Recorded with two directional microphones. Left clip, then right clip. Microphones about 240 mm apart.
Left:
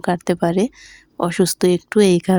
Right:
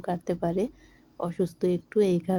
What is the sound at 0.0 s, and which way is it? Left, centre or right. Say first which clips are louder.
Speech: left 10 dB; left.